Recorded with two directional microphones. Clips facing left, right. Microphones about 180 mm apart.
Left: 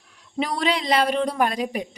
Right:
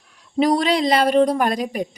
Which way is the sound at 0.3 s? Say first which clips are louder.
Right 7 dB; 40° right (ahead or behind).